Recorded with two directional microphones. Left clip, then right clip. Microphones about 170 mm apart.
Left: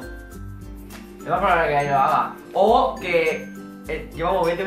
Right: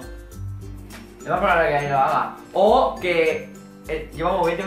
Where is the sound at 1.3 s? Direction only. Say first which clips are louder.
Even; centre (ahead or behind).